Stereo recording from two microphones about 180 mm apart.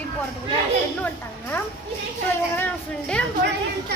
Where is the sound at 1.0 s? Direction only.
10° left (ahead or behind).